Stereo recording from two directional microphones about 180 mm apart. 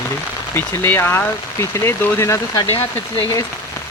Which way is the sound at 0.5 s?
10° left (ahead or behind).